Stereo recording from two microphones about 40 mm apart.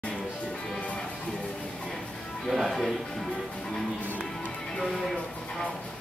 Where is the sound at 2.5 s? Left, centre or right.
Centre.